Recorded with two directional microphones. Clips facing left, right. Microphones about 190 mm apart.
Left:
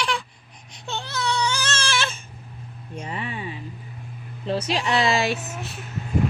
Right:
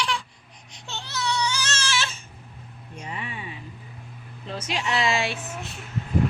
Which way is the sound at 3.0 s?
35° left (ahead or behind).